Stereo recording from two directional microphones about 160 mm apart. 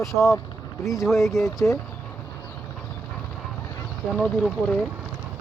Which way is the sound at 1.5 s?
20° left (ahead or behind).